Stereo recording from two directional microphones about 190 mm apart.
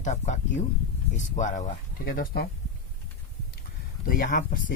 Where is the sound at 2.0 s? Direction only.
50° left (ahead or behind).